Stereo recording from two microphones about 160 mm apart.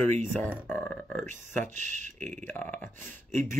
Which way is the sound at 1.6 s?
50° right (ahead or behind).